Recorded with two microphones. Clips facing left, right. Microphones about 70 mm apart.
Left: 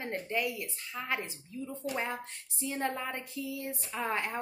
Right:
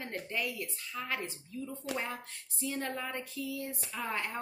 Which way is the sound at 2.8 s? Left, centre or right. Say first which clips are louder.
Left 4 dB; centre.